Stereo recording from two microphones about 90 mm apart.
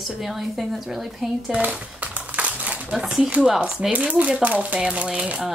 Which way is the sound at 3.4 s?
5° right (ahead or behind).